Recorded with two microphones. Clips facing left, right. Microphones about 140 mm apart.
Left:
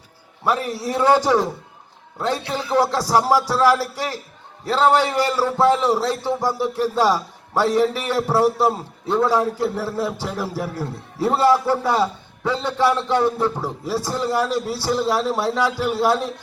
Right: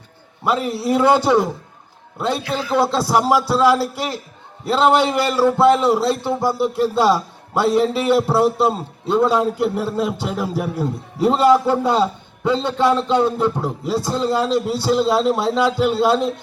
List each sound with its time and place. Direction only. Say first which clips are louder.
0.4 s a man's voice: right 3 dB; 15° right (ahead or behind)